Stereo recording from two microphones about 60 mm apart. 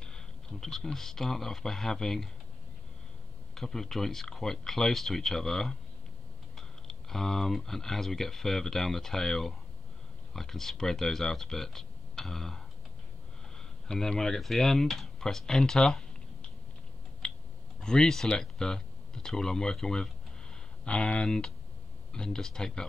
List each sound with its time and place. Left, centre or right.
0.0 s speech: centre
3.5 s speech: centre
17.2 s a sound: centre
17.7 s speech: centre
20.8 s speech: centre